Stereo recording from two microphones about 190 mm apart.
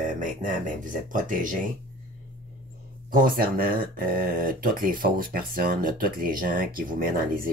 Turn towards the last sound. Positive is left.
turn(degrees=-50)  # may be behind; listen again after turning